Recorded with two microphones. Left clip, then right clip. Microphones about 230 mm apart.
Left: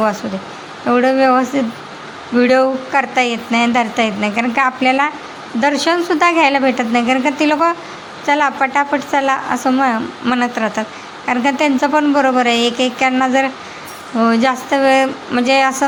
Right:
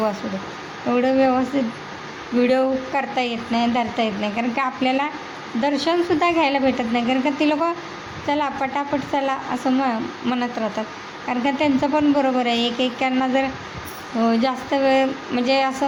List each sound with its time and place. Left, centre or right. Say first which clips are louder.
0.9 s speech: left 6 dB; centre